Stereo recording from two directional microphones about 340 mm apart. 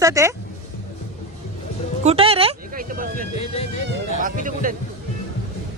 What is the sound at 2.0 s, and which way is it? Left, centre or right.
Speech, centre.